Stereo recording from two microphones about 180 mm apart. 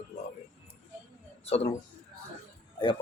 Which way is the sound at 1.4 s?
35° left (ahead or behind).